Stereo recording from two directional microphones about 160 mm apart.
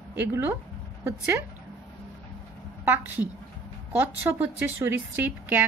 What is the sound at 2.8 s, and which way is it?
A woman's voice, 10° right (ahead or behind).